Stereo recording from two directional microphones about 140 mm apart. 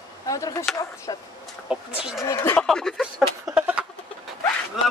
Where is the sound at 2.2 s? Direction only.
20° left (ahead or behind).